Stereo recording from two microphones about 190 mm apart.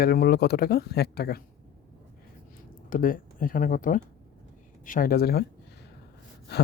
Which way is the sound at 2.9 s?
45° left (ahead or behind).